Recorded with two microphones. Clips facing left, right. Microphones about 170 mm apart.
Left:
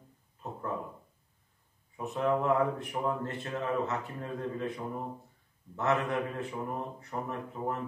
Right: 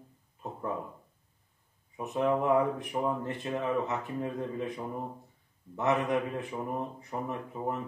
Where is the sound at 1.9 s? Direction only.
20° right (ahead or behind).